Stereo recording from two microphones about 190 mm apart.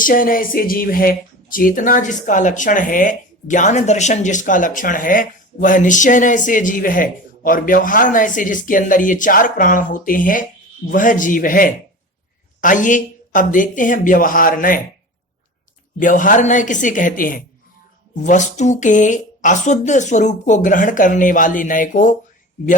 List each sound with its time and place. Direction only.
0.0 s speech: 45° left (ahead or behind)
16.0 s speech: 45° left (ahead or behind)